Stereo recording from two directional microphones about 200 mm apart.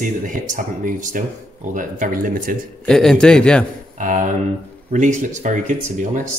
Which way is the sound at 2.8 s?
Centre (ahead or behind).